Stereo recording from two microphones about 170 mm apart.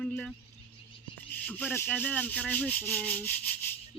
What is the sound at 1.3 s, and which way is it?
Rub, 10° left (ahead or behind).